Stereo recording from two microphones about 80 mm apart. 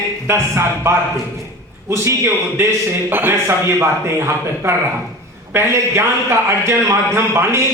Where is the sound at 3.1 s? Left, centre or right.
Right.